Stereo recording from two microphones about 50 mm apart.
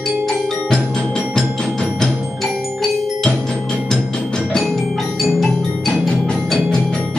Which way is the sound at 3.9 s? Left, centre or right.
Centre.